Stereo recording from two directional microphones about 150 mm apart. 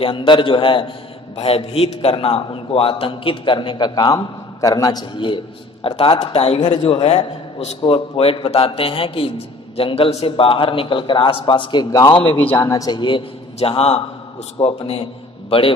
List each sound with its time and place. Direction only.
0.0 s a man's voice: 35° left (ahead or behind)
12.2 s a man's voice: 35° left (ahead or behind)
12.5 s a man's voice: 25° left (ahead or behind); by 15.0 s 40° left (ahead or behind)